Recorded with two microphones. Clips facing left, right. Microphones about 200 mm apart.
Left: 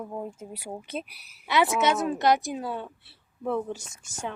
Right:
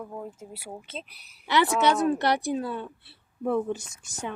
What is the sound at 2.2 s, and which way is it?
Speech, 60° right (ahead or behind).